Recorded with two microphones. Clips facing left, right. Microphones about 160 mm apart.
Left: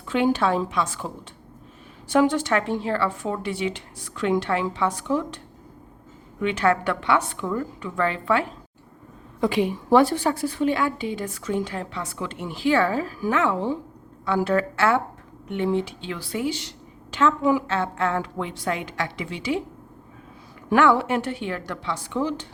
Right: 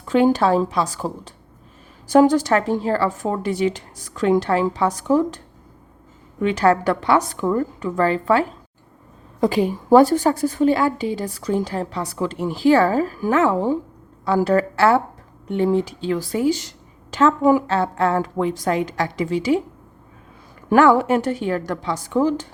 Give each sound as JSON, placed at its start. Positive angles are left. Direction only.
{"t": 0.0, "sound": "a woman's voice", "side_deg": -40}
{"t": 6.4, "sound": "a woman's voice", "side_deg": -40}
{"t": 20.7, "sound": "a woman's voice", "side_deg": -40}